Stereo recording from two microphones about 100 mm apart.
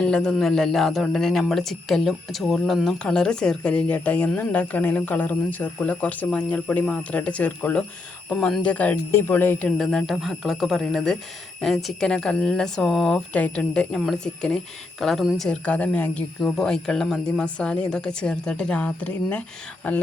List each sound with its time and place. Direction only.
0.0 s speech: 10° left (ahead or behind)
9.6 s speech: 5° left (ahead or behind)
15.4 s speech: 15° left (ahead or behind)